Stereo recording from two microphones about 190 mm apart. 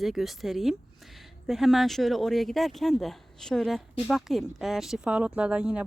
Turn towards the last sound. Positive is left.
turn(degrees=-5)  # may be behind; listen again after turning